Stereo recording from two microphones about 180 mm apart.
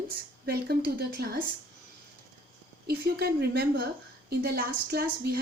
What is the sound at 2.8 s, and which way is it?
A woman's voice, 60° right (ahead or behind).